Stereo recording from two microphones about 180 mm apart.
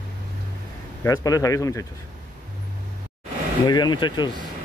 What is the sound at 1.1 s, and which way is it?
Speech, 20° left (ahead or behind).